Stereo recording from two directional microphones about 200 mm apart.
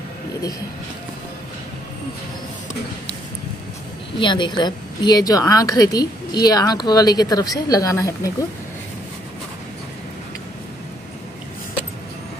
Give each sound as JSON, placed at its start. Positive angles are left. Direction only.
{"t": 4.2, "sound": "a woman's voice", "side_deg": 25}